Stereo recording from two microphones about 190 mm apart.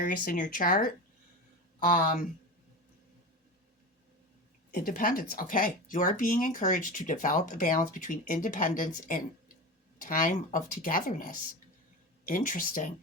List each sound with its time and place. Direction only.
0.0 s speech: 45° left (ahead or behind)
4.7 s speech: 50° left (ahead or behind)